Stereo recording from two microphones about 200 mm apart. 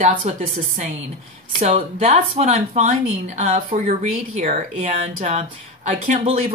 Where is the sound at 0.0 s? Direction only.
40° right (ahead or behind).